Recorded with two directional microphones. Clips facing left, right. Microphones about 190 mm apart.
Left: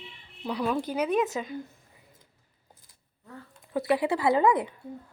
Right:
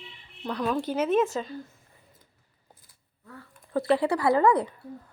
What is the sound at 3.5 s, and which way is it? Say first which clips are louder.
Speech: right 2 dB; 15° left (ahead or behind).